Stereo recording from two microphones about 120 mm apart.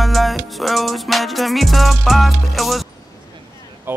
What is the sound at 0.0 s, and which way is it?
Music, centre (ahead or behind).